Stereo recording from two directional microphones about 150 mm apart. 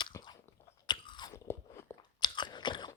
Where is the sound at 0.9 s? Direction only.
30° left (ahead or behind).